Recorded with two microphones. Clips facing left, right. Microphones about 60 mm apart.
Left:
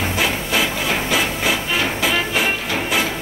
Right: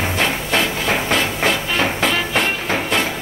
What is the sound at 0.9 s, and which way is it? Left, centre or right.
Train, right.